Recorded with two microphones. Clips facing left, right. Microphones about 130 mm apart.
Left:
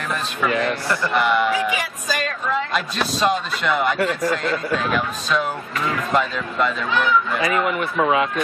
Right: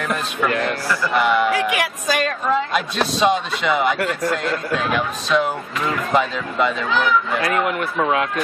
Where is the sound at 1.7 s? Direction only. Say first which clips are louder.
Right 3 dB; 65° right (ahead or behind).